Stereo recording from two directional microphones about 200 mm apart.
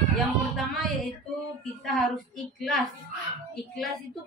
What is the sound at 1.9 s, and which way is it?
A woman's voice, centre (ahead or behind).